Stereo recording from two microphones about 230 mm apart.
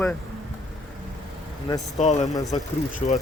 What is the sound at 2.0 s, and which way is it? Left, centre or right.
Speech, left.